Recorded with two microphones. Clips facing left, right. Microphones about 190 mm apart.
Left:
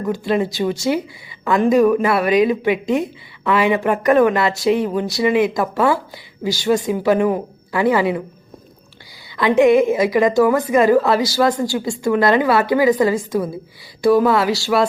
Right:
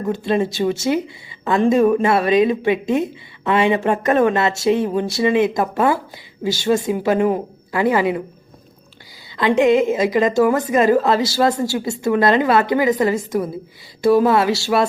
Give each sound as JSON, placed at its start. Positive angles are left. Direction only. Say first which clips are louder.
{"t": 0.0, "sound": "a woman's voice", "louder": "even", "side_deg": -25}
{"t": 9.6, "sound": "a woman's voice", "louder": "left 2 dB", "side_deg": -20}